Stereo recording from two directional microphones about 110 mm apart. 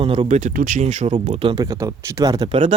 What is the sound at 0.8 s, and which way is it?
Speech, 90° right.